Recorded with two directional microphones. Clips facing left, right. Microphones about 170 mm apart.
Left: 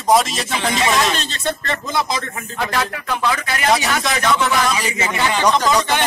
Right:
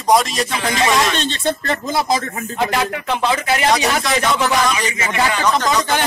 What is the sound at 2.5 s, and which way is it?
Speech, 20° right (ahead or behind).